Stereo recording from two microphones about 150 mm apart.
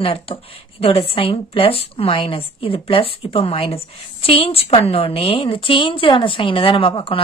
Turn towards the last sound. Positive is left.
turn(degrees=35)  # may be behind; listen again after turning